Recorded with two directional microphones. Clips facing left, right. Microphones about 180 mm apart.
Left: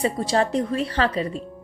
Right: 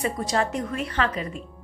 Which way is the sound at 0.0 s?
30° left (ahead or behind).